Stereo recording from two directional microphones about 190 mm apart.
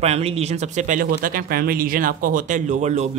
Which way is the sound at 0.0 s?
35° right (ahead or behind).